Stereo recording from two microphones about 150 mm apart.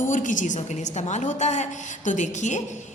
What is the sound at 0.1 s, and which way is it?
A woman's voice, 60° left (ahead or behind).